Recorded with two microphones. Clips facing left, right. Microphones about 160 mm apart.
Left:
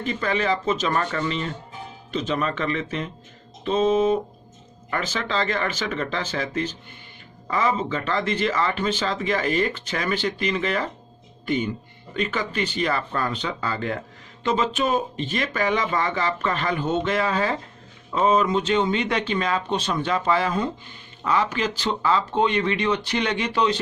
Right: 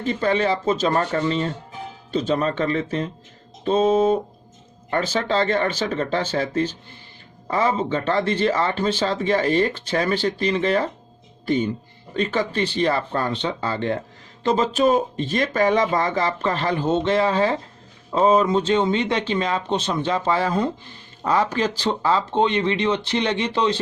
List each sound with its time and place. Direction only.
0.0 s speech: 30° right (ahead or behind)